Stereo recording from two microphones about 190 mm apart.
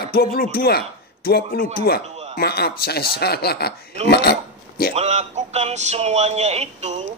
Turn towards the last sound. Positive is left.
turn(degrees=-35)  # may be behind; listen again after turning